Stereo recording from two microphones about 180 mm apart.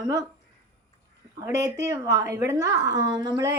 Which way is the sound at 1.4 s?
15° right (ahead or behind).